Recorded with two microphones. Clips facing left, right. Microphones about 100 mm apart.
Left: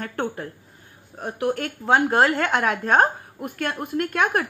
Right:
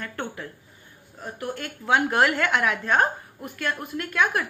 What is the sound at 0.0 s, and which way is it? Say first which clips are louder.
Speech: left 5 dB; 45° left (ahead or behind).